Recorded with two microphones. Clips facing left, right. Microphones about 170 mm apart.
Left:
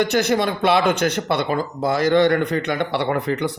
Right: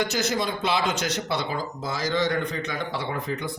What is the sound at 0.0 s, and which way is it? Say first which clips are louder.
Speech: left 7 dB; 60° left (ahead or behind).